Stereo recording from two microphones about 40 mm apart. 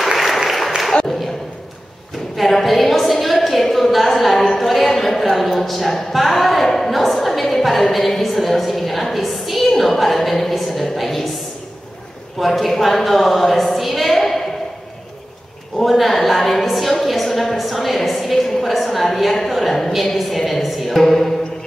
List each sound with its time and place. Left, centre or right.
0.1 s applause: centre
2.3 s a sound: centre
5.3 s a woman's voice: centre
12.4 s a woman's voice: centre
15.8 s a woman's voice: centre